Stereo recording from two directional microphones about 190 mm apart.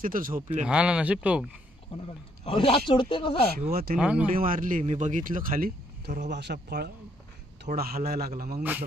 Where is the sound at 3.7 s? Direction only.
55° right (ahead or behind).